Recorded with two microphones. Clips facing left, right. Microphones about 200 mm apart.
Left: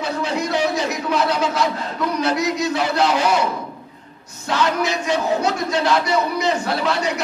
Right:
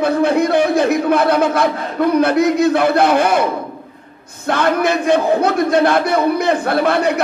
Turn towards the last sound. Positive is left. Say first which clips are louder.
# right 6 dB
turn(degrees=-55)  # may be behind; listen again after turning